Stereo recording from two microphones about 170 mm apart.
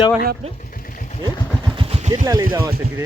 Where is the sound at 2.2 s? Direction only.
20° right (ahead or behind).